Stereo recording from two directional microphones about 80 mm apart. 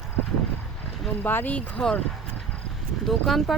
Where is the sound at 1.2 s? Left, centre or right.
Left.